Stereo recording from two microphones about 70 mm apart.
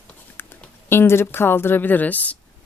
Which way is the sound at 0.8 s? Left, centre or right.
Left.